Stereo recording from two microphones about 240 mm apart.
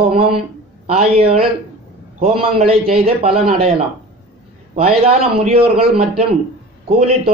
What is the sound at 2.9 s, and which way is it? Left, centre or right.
Mantra, right.